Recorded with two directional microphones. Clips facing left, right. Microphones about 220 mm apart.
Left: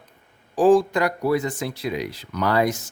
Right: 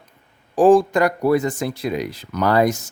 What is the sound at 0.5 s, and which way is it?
Speech, 50° right (ahead or behind).